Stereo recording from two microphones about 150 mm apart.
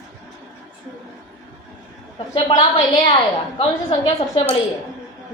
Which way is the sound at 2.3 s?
30° left (ahead or behind).